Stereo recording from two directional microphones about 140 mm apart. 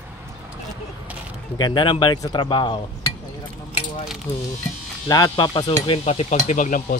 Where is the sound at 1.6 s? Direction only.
35° left (ahead or behind).